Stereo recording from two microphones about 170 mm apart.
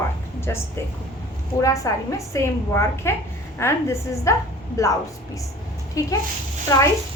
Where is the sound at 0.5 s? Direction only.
15° left (ahead or behind).